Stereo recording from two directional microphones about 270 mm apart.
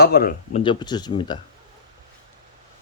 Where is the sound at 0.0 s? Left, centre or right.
Left.